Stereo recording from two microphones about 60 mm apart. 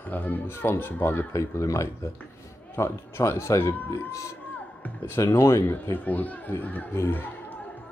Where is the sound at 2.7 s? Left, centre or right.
Left.